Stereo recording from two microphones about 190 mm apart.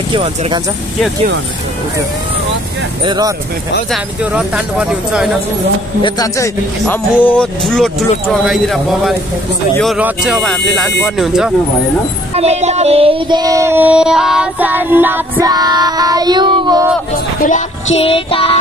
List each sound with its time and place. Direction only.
0.1 s female singing: 30° right (ahead or behind)
3.1 s female singing: 20° right (ahead or behind)
3.9 s speech: 5° right (ahead or behind)
6.0 s speech: 20° left (ahead or behind); by 11.5 s centre (ahead or behind)
12.4 s female singing: 35° right (ahead or behind)
17.4 s music: 40° left (ahead or behind)